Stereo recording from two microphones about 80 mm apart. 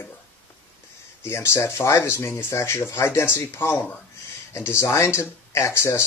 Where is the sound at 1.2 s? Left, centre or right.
Left.